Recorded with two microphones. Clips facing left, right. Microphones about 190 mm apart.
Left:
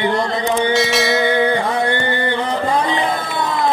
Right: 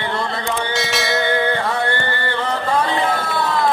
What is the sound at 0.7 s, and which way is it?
Bell, centre (ahead or behind).